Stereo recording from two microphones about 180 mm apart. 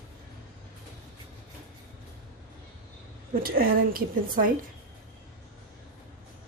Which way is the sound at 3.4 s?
55° right (ahead or behind).